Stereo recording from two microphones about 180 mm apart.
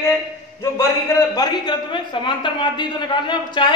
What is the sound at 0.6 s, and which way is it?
A man's voice, 15° left (ahead or behind).